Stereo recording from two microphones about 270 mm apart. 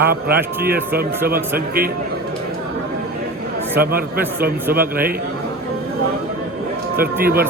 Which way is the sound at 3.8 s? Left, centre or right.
Right.